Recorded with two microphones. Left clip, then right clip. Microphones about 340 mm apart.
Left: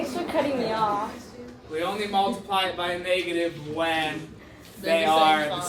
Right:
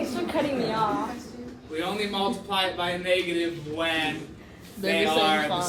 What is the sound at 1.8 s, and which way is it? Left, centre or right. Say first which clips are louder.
A man's voice: left 3 dB; centre.